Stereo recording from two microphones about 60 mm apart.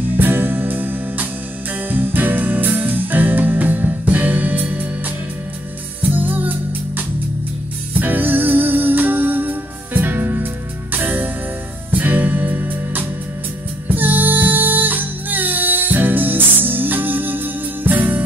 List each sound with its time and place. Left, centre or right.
0.2 s music: right
6.0 s music: right